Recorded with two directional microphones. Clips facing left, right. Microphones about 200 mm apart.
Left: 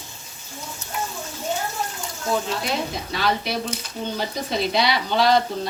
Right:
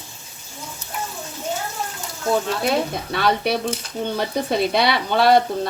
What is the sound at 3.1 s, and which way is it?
Speech, 60° right (ahead or behind).